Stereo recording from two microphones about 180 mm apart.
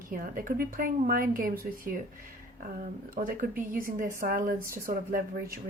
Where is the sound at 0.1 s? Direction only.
50° right (ahead or behind).